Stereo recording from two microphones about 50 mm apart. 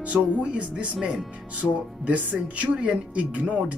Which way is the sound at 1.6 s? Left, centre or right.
Right.